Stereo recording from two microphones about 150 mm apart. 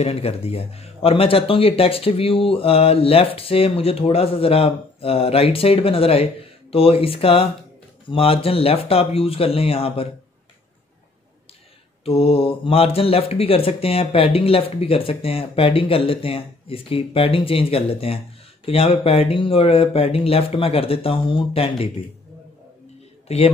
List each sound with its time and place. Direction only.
0.0 s speech: 40° left (ahead or behind)
12.0 s speech: 40° left (ahead or behind)
23.2 s speech: 45° left (ahead or behind)